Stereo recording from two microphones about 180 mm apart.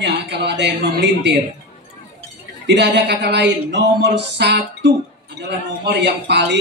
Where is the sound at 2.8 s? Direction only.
70° right (ahead or behind).